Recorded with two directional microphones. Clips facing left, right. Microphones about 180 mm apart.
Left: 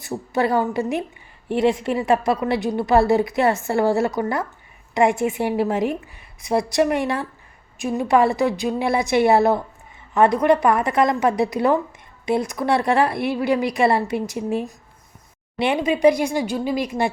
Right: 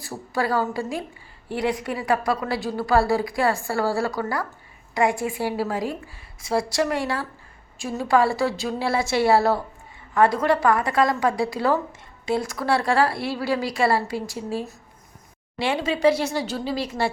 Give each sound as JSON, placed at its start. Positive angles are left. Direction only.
{"t": 0.0, "sound": "a woman's voice", "side_deg": 20}